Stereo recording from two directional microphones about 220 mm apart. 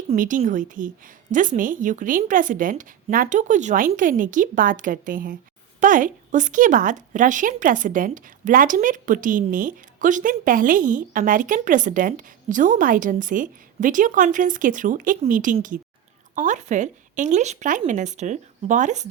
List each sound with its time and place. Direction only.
0.1 s a woman's voice: 35° right (ahead or behind)